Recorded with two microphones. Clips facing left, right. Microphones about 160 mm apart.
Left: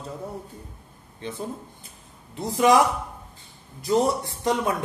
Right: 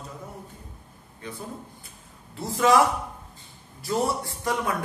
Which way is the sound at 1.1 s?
25° left (ahead or behind).